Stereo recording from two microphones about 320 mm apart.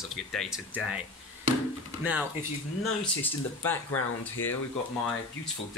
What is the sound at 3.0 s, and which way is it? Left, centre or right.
Speech, centre.